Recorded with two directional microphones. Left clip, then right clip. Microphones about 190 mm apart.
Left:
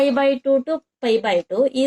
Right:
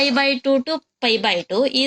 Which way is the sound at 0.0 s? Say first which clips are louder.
Left 1 dB; 35° right (ahead or behind).